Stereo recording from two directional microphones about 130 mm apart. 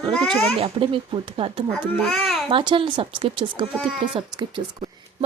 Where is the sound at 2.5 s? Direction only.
40° right (ahead or behind).